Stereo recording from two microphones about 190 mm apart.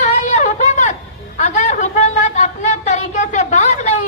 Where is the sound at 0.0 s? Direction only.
40° left (ahead or behind).